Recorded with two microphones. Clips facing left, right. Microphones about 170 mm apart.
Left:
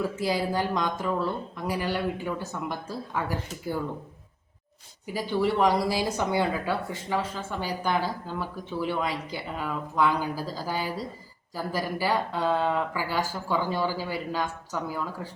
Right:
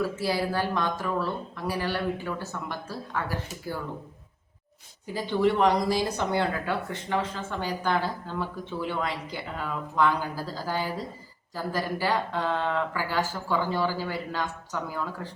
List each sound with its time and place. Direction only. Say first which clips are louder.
0.2 s speech: left 1 dB; 15° left (ahead or behind)
5.1 s speech: right 1 dB; 10° left (ahead or behind)